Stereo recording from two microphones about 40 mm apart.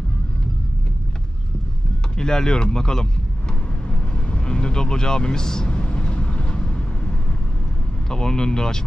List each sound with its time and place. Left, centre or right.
2.1 s speech: centre
3.9 s vehicle: left
5.7 s vehicle: left
8.1 s speech: centre